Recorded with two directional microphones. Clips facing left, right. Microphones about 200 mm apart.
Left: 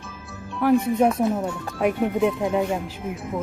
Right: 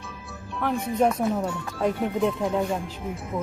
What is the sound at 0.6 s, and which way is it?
Speech, 5° left (ahead or behind).